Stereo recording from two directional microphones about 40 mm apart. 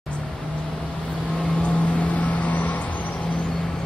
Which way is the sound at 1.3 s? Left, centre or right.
Left.